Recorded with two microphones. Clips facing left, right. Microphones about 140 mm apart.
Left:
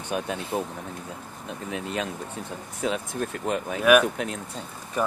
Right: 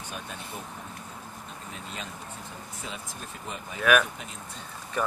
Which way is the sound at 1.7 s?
80° left.